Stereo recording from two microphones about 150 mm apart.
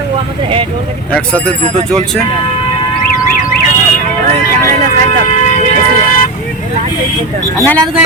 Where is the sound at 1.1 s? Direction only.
5° left (ahead or behind).